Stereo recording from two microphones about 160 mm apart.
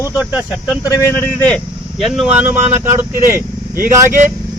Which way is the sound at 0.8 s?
15° left (ahead or behind).